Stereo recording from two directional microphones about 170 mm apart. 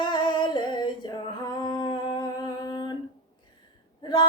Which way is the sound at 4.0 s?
25° left (ahead or behind).